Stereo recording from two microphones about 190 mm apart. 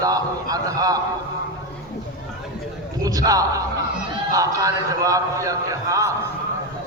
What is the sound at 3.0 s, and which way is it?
A man's voice, 20° right (ahead or behind).